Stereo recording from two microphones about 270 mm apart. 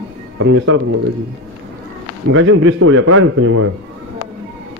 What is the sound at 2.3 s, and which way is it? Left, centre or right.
A man's voice, right.